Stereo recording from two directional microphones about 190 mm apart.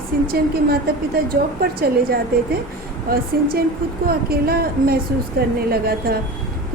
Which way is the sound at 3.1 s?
50° right (ahead or behind).